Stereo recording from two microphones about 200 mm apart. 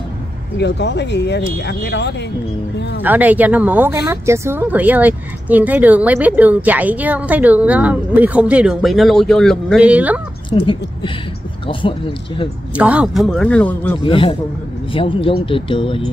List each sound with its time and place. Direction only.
0.6 s speech: 60° left (ahead or behind)
3.0 s a woman's voice: 10° right (ahead or behind)
10.5 s speech: 25° left (ahead or behind)
12.7 s speech: 5° right (ahead or behind)
14.0 s speech: 25° left (ahead or behind)